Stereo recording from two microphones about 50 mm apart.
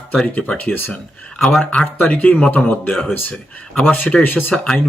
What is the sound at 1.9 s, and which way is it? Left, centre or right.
Speech, left.